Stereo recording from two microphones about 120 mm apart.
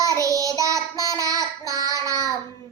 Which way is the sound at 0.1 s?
30° right (ahead or behind).